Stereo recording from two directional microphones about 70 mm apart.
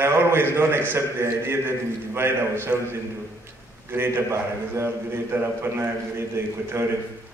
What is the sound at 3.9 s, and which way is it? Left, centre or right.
A man's voice, right.